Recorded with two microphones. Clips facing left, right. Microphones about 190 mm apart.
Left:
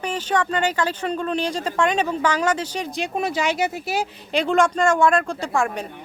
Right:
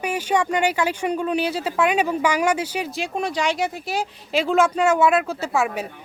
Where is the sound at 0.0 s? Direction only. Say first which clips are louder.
Right 1 dB; 10° right (ahead or behind).